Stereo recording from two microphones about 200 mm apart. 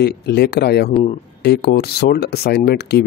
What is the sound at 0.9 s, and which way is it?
Speech, 30° left (ahead or behind).